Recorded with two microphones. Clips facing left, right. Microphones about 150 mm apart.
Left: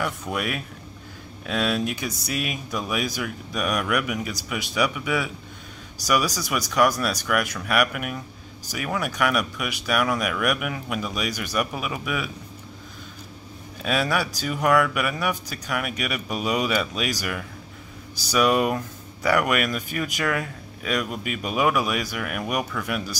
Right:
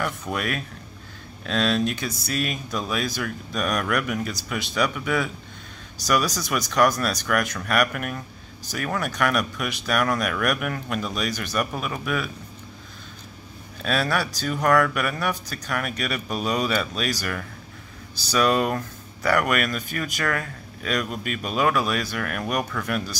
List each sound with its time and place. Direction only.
0.0 s speech: 10° left (ahead or behind)
13.8 s speech: 10° left (ahead or behind)